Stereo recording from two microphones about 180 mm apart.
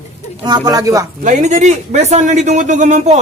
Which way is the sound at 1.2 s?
40° right (ahead or behind).